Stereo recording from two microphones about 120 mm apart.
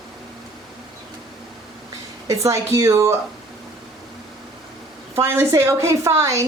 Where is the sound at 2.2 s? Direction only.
25° right (ahead or behind).